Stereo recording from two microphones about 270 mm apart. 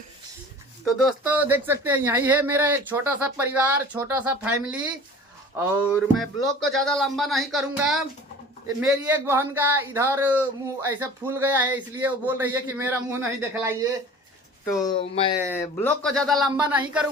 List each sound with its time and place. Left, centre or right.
0.9 s speech: centre
14.8 s speech: centre
15.5 s speech: centre